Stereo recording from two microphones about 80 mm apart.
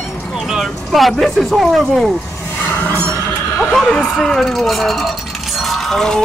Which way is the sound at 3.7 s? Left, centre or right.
Centre.